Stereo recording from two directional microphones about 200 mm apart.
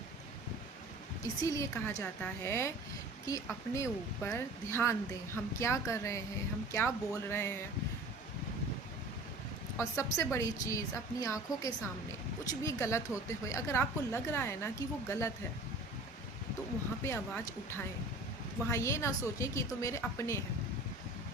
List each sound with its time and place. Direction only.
1.2 s a woman's voice: 15° left (ahead or behind)
9.7 s a woman's voice: 15° left (ahead or behind)
17.0 s a woman's voice: 15° left (ahead or behind)